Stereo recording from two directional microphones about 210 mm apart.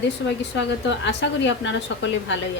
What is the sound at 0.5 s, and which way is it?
A woman's voice, 60° left (ahead or behind).